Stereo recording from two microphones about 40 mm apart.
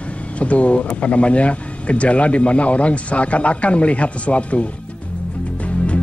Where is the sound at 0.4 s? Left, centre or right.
Left.